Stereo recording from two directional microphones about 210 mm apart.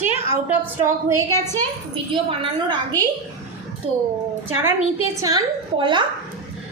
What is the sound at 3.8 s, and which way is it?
Speech, 25° right (ahead or behind).